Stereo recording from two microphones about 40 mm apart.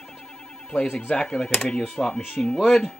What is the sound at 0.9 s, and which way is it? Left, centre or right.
Speech, left.